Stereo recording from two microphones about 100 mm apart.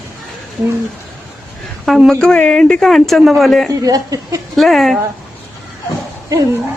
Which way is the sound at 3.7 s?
35° right (ahead or behind).